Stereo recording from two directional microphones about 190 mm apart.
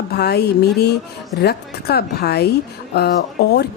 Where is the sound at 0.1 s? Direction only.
60° left (ahead or behind).